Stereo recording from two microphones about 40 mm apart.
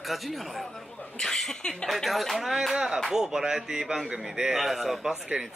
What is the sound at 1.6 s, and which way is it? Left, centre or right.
Speech, centre.